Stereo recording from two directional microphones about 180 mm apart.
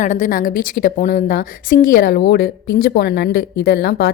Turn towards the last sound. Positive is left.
turn(degrees=60)  # may be behind; listen again after turning